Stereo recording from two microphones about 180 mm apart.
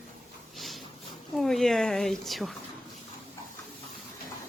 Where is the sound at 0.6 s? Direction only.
Centre (ahead or behind).